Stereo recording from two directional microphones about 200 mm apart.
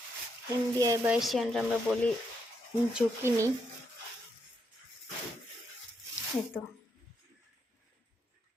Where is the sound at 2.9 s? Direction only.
15° right (ahead or behind).